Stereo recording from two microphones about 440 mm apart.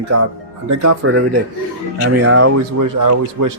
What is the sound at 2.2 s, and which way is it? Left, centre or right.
Speech, right.